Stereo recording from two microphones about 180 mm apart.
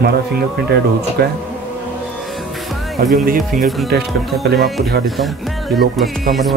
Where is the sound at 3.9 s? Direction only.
60° right (ahead or behind).